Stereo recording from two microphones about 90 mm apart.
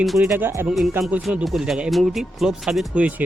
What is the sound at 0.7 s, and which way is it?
Speech, centre (ahead or behind).